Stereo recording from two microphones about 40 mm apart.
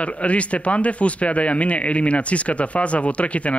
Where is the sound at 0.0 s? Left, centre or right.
Left.